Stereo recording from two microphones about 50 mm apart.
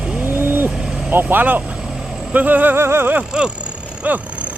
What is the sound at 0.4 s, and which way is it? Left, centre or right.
Vehicle, right.